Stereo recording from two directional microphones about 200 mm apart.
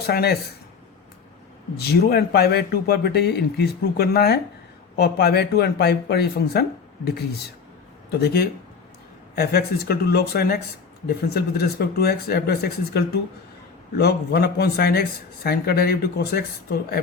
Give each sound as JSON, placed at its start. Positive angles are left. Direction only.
{"t": 0.0, "sound": "speech", "side_deg": 50}
{"t": 1.8, "sound": "speech", "side_deg": 50}